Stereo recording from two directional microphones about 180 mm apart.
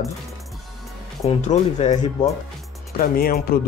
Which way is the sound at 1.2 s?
35° left (ahead or behind).